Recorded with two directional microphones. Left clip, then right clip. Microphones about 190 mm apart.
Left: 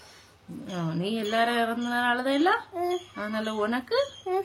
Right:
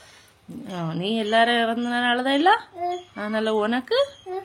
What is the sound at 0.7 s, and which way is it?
Speech, 25° right (ahead or behind).